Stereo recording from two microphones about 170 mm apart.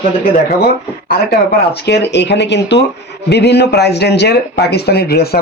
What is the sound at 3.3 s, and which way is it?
Speech, 80° left.